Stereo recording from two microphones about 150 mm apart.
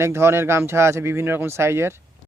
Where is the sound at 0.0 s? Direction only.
15° right (ahead or behind).